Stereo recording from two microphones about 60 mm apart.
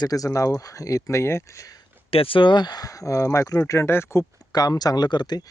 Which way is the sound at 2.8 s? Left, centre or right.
Left.